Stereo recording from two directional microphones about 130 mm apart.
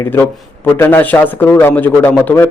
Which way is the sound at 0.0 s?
20° left (ahead or behind).